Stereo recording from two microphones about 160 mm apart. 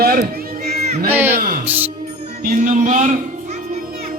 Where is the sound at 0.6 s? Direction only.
75° right (ahead or behind).